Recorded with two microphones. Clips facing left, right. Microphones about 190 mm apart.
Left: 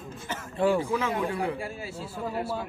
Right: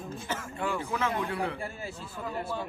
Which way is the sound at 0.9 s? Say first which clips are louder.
Left 2 dB; 10° left (ahead or behind).